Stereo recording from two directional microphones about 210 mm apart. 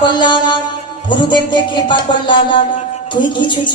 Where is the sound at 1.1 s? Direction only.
20° left (ahead or behind).